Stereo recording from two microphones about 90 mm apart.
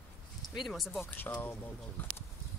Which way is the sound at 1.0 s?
20° left (ahead or behind).